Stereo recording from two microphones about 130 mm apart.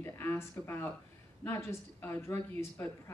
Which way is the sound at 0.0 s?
20° left (ahead or behind).